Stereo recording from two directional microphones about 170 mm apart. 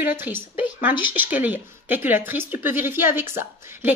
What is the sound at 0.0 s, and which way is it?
A woman's voice, 10° right (ahead or behind).